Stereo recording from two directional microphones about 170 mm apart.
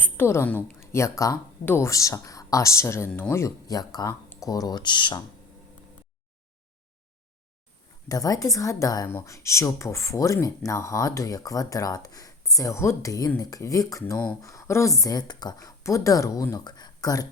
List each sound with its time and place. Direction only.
0.0 s a woman's voice: 15° left (ahead or behind)
8.0 s a woman's voice: 20° left (ahead or behind)